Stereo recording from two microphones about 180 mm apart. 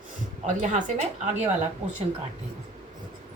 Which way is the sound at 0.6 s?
40° right (ahead or behind).